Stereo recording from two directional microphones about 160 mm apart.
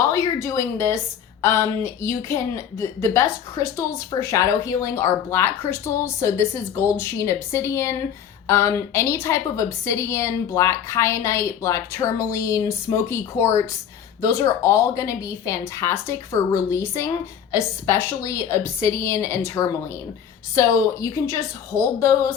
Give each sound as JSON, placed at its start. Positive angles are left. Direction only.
{"t": 0.1, "sound": "a woman's voice", "side_deg": 20}